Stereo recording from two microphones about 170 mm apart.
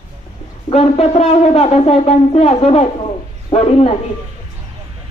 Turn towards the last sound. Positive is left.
turn(degrees=35)  # may be behind; listen again after turning